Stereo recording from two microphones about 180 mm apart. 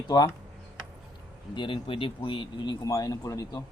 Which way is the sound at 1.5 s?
25° left (ahead or behind).